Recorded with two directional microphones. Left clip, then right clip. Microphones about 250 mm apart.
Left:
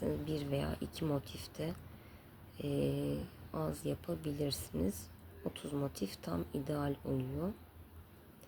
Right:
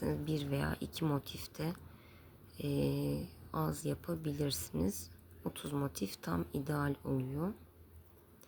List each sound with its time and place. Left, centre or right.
0.0 s speech: centre